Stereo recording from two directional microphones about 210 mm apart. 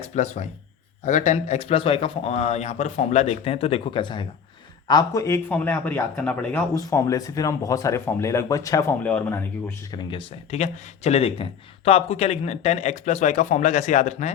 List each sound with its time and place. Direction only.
0.0 s speech: 30° left (ahead or behind)